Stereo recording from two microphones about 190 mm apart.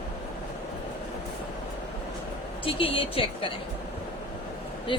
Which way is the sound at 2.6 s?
30° left (ahead or behind).